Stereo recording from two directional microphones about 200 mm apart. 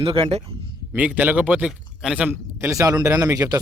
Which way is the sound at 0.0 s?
25° right (ahead or behind).